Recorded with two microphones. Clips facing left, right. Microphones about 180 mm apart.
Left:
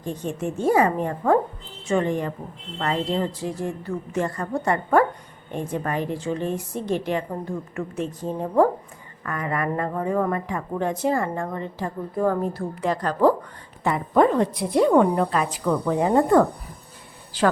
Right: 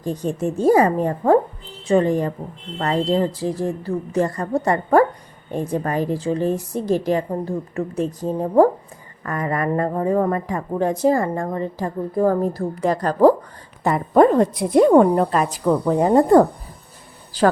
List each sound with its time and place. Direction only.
0.0 s a woman's voice: 35° right (ahead or behind)